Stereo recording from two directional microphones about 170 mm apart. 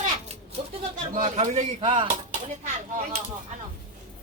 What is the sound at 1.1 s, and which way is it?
Speech, 45° right (ahead or behind).